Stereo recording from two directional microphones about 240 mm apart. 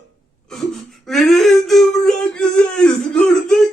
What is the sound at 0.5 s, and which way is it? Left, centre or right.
Whimper, centre.